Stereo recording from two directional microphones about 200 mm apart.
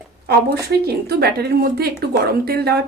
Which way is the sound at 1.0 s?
55° right (ahead or behind).